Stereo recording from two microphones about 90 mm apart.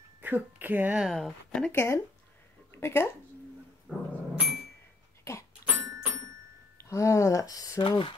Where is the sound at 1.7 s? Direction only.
30° left (ahead or behind).